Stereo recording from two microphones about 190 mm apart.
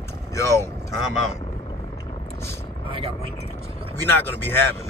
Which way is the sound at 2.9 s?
30° right (ahead or behind).